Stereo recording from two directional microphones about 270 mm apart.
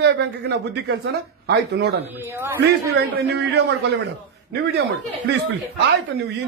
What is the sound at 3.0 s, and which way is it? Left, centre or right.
Speech, right.